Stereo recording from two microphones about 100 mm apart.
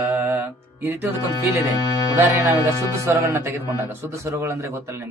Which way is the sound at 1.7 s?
40° left (ahead or behind).